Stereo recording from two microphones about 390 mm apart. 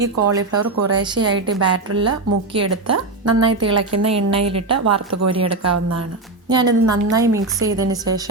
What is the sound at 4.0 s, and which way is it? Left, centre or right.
Speech, centre.